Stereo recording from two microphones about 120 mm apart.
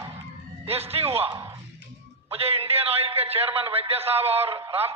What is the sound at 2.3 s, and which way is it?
A man's voice, 55° right (ahead or behind).